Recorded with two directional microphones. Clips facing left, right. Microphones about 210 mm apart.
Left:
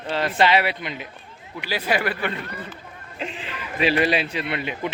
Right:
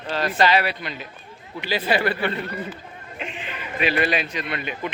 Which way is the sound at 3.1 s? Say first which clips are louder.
Left 2 dB; 30° left (ahead or behind).